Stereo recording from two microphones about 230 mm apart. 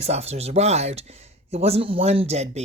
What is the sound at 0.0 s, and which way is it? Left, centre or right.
Speech, right.